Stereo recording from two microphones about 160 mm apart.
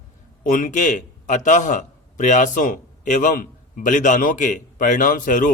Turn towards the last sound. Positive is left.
turn(degrees=55)  # may be behind; listen again after turning